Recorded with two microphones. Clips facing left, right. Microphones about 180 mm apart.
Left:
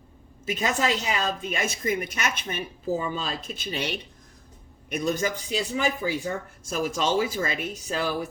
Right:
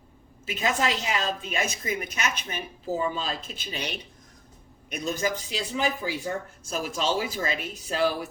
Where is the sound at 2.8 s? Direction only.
50° left (ahead or behind).